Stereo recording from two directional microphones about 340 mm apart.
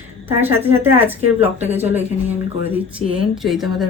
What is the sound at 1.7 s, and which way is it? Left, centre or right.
Speech, centre.